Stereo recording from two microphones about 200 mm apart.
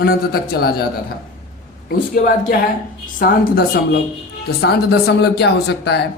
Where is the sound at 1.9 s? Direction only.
45° left (ahead or behind).